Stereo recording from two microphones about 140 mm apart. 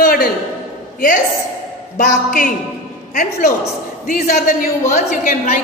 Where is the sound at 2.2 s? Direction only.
70° left (ahead or behind).